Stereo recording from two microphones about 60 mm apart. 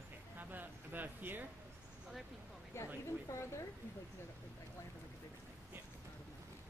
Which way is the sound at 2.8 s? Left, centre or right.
Left.